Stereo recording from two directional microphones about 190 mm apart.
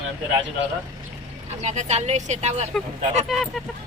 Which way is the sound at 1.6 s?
40° right (ahead or behind).